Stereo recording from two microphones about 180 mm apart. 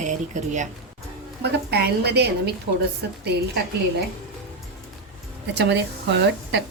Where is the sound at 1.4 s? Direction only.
65° right (ahead or behind).